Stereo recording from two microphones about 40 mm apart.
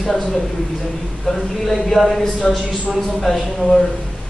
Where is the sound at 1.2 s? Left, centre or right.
Centre.